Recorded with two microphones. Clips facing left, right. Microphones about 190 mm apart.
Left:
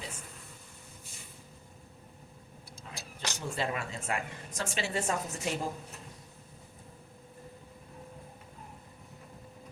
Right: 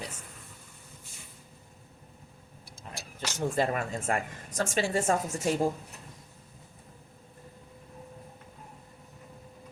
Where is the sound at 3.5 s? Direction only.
50° right (ahead or behind).